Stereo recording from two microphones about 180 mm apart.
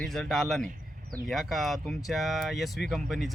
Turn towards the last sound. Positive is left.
turn(degrees=0)  # may be behind; listen again after turning